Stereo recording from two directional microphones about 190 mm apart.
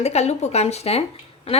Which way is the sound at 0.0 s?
35° left (ahead or behind).